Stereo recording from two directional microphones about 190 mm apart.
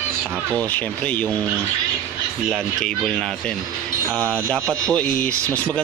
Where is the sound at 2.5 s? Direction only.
5° left (ahead or behind).